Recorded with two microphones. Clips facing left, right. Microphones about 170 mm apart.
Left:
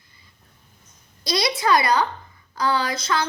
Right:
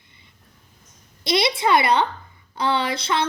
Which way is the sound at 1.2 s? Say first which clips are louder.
Right 2 dB; 25° right (ahead or behind).